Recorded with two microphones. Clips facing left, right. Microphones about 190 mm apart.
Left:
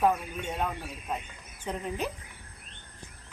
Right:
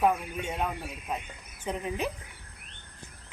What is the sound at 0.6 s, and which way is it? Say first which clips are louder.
Speech: even; 5° right (ahead or behind).